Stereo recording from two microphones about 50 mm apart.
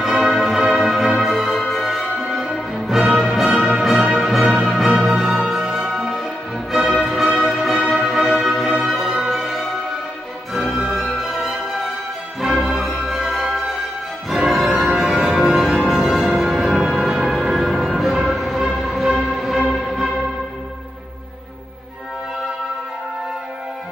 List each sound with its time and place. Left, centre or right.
0.0 s music: centre
1.3 s music: centre; by 4.2 s right
4.2 s music: centre
12.9 s music: centre